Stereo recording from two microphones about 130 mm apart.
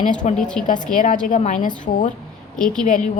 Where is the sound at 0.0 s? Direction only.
75° left (ahead or behind).